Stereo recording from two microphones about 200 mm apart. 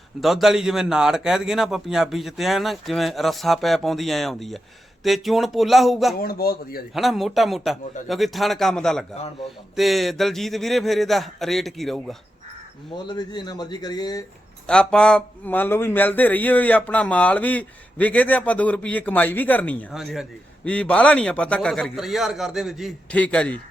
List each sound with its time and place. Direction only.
0.2 s a man's voice: centre (ahead or behind)
6.1 s a man's voice: 50° left (ahead or behind)
6.9 s a man's voice: centre (ahead or behind)
13.1 s speech: 20° left (ahead or behind)
14.7 s a man's voice: 5° left (ahead or behind)